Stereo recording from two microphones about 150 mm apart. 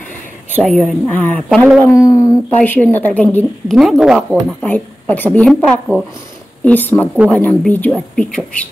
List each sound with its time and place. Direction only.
0.6 s a woman's voice: 10° left (ahead or behind)
1.9 s a sound: 20° left (ahead or behind)
2.5 s a woman's voice: 10° left (ahead or behind)
3.7 s a woman's voice: centre (ahead or behind)
4.6 s a woman's voice: 10° left (ahead or behind)